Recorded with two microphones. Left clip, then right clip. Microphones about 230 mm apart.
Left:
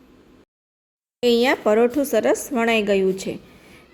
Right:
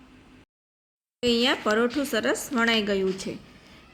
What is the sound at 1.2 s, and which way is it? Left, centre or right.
A woman's voice, centre.